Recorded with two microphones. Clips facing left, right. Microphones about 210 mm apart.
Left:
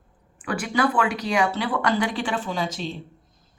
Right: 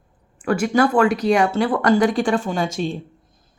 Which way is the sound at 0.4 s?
45° right (ahead or behind).